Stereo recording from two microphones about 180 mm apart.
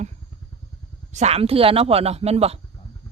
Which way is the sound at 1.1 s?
35° right (ahead or behind).